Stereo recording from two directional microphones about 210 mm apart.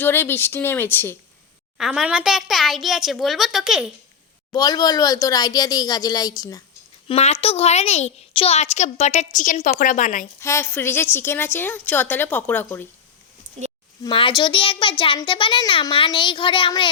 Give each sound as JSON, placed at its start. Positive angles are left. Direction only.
{"t": 0.0, "sound": "a woman's voice", "side_deg": 10}
{"t": 1.8, "sound": "a child's voice", "side_deg": -5}
{"t": 4.5, "sound": "a woman's voice", "side_deg": 20}
{"t": 7.1, "sound": "a woman's voice", "side_deg": 30}
{"t": 10.4, "sound": "a woman's voice", "side_deg": 10}
{"t": 14.0, "sound": "a child's voice", "side_deg": 25}